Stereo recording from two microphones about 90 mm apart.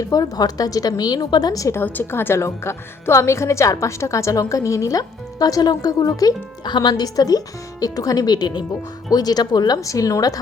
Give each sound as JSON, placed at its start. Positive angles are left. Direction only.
{"t": 0.1, "sound": "speech", "side_deg": 45}
{"t": 1.8, "sound": "a woman's voice", "side_deg": 25}